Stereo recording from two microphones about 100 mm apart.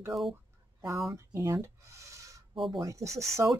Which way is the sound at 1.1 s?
30° right (ahead or behind).